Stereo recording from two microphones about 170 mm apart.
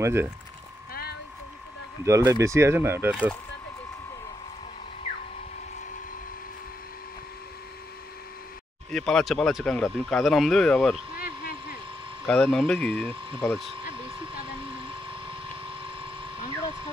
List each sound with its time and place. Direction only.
0.0 s speech: 15° right (ahead or behind)
2.0 s speech: 20° right (ahead or behind)
8.9 s speech: centre (ahead or behind)
11.1 s vehicle: 60° left (ahead or behind)
12.3 s speech: 5° left (ahead or behind)